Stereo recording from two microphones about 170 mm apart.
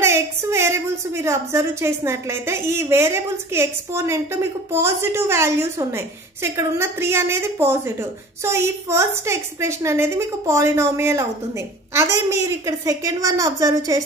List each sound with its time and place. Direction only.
0.0 s a woman's voice: 15° right (ahead or behind)